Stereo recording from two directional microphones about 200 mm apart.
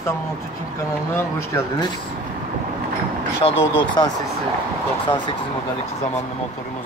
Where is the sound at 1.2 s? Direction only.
15° left (ahead or behind).